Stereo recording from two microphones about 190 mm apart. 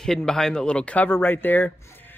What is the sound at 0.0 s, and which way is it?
Speech, 5° left (ahead or behind).